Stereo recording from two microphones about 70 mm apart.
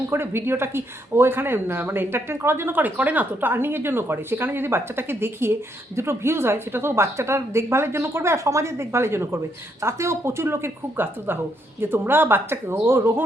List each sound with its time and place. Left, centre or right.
0.1 s speech: right